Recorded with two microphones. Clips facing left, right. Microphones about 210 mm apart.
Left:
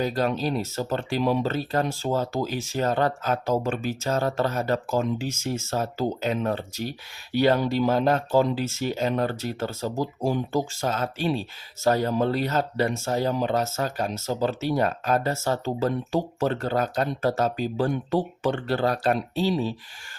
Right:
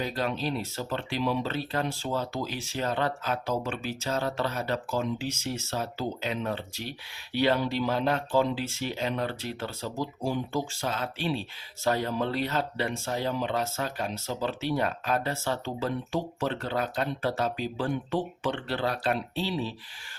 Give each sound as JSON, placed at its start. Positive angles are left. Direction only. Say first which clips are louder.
{"t": 0.0, "sound": "speech", "louder": "left 5 dB", "side_deg": 40}